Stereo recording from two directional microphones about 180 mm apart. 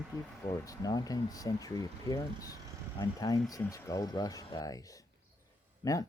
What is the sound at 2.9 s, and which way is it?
Speech, 20° left (ahead or behind).